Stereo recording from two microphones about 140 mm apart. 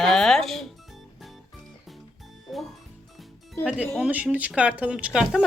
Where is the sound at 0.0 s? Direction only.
5° left (ahead or behind).